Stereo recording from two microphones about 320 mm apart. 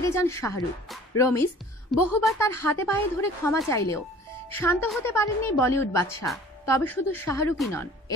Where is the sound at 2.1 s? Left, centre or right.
Centre.